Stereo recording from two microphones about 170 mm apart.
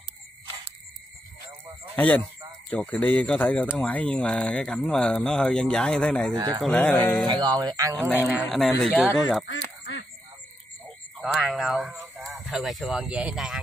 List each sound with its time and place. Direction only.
2.0 s speech: 10° left (ahead or behind)
6.3 s speech: 20° right (ahead or behind)
6.6 s speech: 5° left (ahead or behind)
7.2 s speech: 25° right (ahead or behind)
8.5 s speech: centre (ahead or behind)
9.5 s goose: 85° left
11.1 s speech: centre (ahead or behind)